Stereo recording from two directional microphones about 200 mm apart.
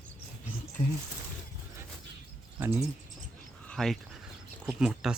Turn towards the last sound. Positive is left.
turn(degrees=-5)  # may be behind; listen again after turning